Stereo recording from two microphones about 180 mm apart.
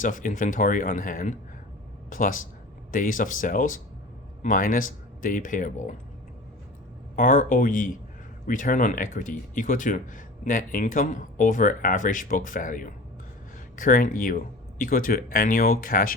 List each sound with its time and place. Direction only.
0.0 s speech: 45° left (ahead or behind)
7.2 s speech: 45° left (ahead or behind)